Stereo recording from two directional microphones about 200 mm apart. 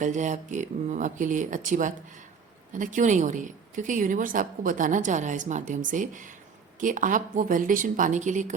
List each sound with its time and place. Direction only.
0.0 s a woman's voice: 40° right (ahead or behind)